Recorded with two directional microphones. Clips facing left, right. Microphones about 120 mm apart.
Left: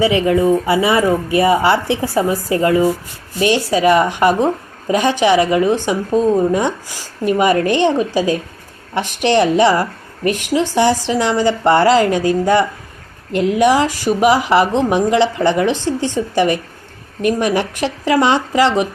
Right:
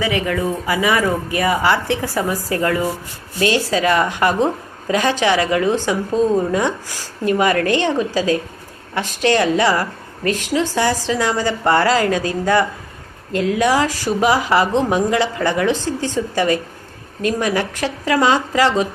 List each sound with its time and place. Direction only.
0.0 s a woman's voice: 25° left (ahead or behind)